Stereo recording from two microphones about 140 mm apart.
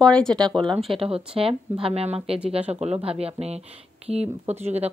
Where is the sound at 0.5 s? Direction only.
35° right (ahead or behind).